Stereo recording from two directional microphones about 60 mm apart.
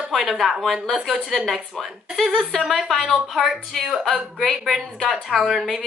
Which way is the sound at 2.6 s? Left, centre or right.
Centre.